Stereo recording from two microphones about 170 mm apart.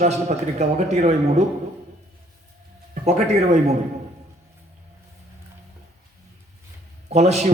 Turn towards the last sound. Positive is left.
turn(degrees=-40)  # may be behind; listen again after turning